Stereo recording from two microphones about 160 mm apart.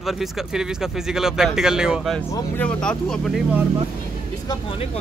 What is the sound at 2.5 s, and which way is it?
Speech, 10° left (ahead or behind).